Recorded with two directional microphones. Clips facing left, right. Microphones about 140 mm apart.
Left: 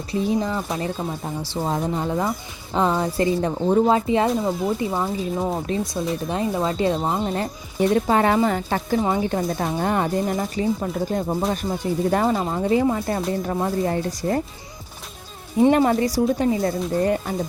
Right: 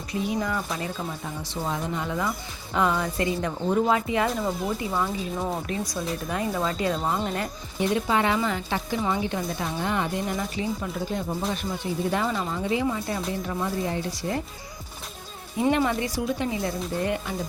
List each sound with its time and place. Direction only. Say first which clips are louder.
0.1 s speech: left 5 dB; 30° left (ahead or behind)
7.9 s speech: left 5 dB; 45° left (ahead or behind)
15.7 s speech: left 6 dB; 40° left (ahead or behind)